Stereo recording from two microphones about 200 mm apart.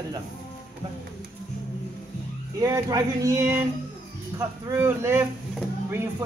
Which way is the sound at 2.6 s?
15° right (ahead or behind).